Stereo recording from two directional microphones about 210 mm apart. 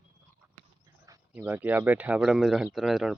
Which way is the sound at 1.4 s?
10° right (ahead or behind).